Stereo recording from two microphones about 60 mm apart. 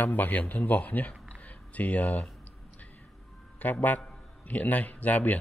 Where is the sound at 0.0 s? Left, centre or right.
Left.